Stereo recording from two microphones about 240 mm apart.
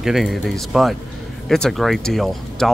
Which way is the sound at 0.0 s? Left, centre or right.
Centre.